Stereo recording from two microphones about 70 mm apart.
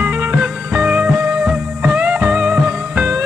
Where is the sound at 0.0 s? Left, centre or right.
Right.